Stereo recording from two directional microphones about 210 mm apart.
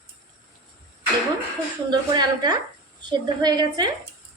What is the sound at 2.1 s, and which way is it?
A woman's voice, 20° right (ahead or behind).